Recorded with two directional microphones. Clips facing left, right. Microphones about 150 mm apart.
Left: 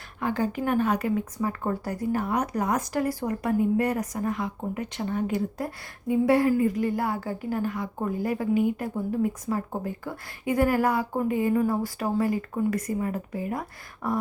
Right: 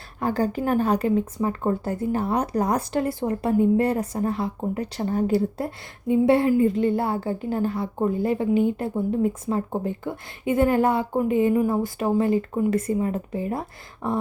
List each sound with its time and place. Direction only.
0.2 s a woman's voice: 35° right (ahead or behind)